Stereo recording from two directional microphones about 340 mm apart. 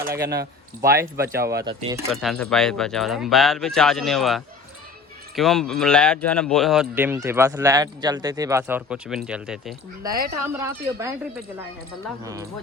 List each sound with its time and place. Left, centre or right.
0.1 s speech: right
0.8 s speech: centre
2.0 s speech: centre
12.2 s speech: centre